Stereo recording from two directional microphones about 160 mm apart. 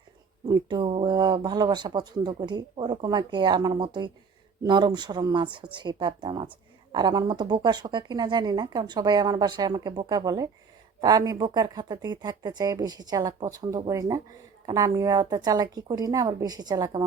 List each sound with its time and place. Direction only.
0.4 s speech: 25° right (ahead or behind)